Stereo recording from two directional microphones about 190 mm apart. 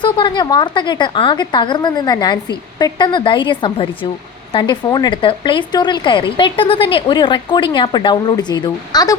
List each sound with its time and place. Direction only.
0.0 s speech: 25° left (ahead or behind)